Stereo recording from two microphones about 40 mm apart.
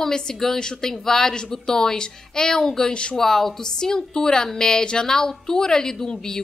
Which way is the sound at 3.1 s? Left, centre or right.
Centre.